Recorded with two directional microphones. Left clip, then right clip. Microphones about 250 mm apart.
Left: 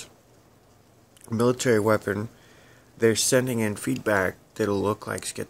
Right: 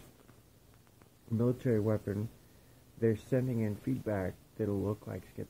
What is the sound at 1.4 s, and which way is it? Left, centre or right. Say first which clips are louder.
Speech: left 11 dB; centre.